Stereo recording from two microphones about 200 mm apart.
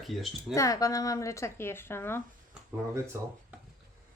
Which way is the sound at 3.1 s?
15° right (ahead or behind).